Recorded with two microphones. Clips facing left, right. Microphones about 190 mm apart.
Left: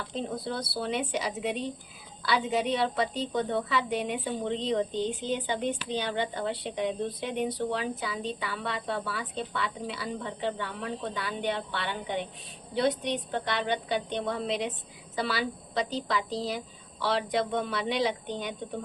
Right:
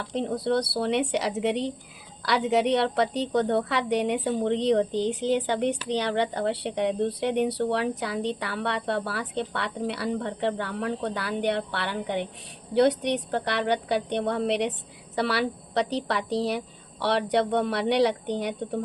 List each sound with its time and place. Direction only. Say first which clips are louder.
0.1 s a woman's voice: right 9 dB; 70° right (ahead or behind)